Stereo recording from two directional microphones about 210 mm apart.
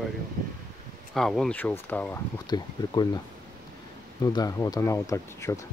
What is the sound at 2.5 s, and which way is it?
Speech, 20° left (ahead or behind).